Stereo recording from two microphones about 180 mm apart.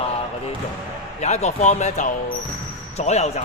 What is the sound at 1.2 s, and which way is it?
Speech, 40° left (ahead or behind).